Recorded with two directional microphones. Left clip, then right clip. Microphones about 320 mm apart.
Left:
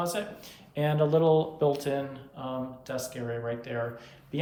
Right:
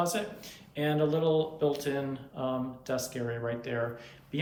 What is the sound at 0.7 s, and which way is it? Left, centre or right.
Speech, centre.